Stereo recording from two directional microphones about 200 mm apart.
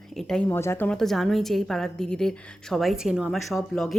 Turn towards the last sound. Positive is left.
turn(degrees=0)  # may be behind; listen again after turning